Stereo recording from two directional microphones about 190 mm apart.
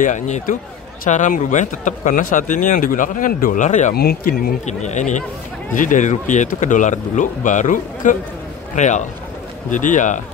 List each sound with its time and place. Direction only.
0.0 s speech: 40° left (ahead or behind)
3.9 s speech: 55° left (ahead or behind)